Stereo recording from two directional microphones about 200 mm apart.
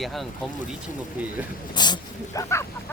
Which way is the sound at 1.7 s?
20° left (ahead or behind).